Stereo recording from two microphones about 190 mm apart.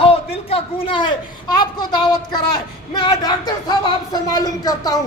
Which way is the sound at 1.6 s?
20° left (ahead or behind).